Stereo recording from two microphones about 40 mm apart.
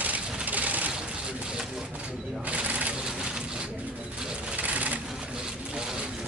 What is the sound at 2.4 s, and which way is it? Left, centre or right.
Sewing machine, right.